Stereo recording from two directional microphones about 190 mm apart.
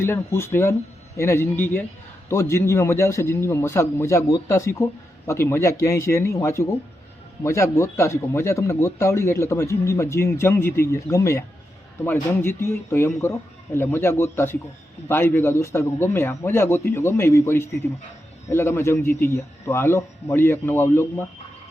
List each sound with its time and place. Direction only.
0.0 s speech: 15° left (ahead or behind)